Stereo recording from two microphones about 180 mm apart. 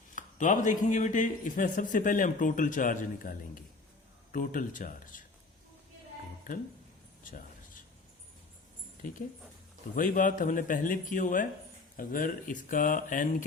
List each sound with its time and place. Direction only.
0.2 s speech: 45° left (ahead or behind)
6.5 s speech: 50° left (ahead or behind)
9.9 s speech: 45° left (ahead or behind)